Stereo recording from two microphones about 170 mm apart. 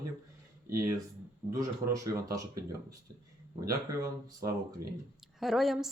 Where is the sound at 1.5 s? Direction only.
20° right (ahead or behind).